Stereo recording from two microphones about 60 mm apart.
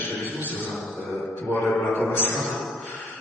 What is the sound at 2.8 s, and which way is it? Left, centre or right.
Music, left.